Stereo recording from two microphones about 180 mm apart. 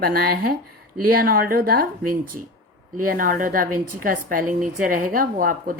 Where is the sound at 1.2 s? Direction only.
55° right (ahead or behind).